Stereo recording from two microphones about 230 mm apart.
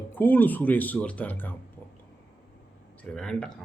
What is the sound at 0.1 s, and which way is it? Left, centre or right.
Speech, centre.